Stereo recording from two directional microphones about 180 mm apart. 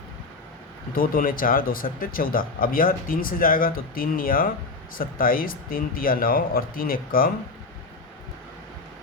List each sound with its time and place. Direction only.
0.9 s speech: 55° left (ahead or behind)